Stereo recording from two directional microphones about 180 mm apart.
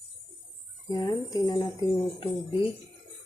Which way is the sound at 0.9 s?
20° left (ahead or behind).